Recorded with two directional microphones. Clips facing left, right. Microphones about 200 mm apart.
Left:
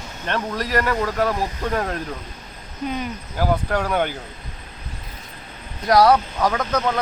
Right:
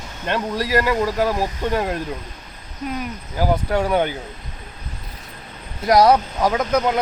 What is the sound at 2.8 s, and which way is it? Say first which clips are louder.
Speech: even; 5° right (ahead or behind).